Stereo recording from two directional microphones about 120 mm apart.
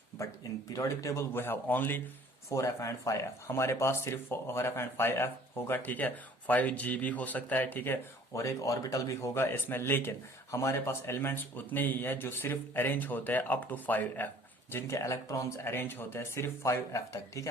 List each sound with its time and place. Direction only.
0.2 s speech: 25° left (ahead or behind)